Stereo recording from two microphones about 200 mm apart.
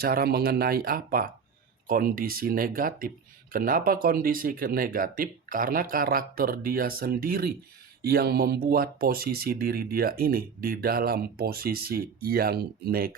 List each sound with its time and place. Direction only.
0.0 s speech: 50° right (ahead or behind)